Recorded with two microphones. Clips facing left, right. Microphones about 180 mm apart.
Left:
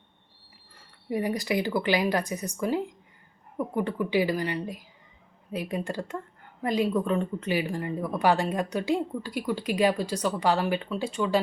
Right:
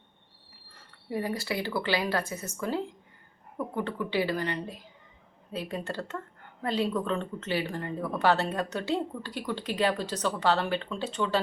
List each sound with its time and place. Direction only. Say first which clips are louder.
1.1 s speech: left 4 dB; 15° left (ahead or behind)